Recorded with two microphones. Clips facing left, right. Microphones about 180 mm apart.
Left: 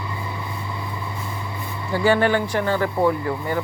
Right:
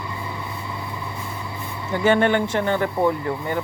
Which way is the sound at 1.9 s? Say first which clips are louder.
Even; 20° right (ahead or behind).